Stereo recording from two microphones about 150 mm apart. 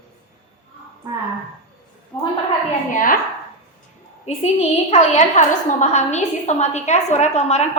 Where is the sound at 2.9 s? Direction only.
65° left (ahead or behind).